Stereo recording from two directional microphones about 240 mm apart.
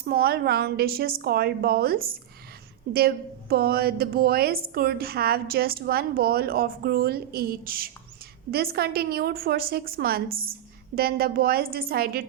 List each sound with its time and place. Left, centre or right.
0.0 s a woman's voice: right